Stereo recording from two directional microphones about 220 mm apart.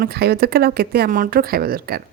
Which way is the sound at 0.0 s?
45° right (ahead or behind).